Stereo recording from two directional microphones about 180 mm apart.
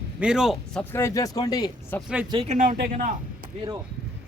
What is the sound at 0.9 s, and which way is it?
Speech, 15° left (ahead or behind).